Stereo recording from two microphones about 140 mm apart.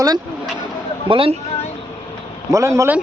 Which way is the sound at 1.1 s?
40° right (ahead or behind).